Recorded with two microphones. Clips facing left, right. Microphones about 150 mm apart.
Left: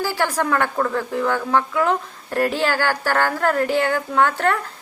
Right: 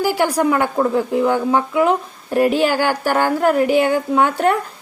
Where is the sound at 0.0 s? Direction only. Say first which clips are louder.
Right 5 dB; 15° right (ahead or behind).